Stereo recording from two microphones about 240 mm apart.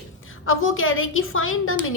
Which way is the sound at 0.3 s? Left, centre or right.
Left.